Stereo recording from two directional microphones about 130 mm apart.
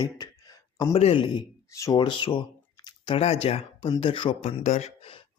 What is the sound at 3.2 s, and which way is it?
Speech, 50° left (ahead or behind).